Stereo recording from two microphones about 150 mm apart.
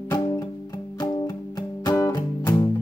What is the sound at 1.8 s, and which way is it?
Music, 20° left (ahead or behind).